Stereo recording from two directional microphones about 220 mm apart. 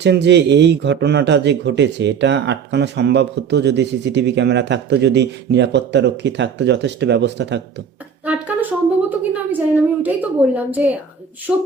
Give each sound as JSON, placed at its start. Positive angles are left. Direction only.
{"t": 0.0, "sound": "speech", "side_deg": -50}
{"t": 8.2, "sound": "music", "side_deg": -5}
{"t": 9.0, "sound": "a woman's voice", "side_deg": -5}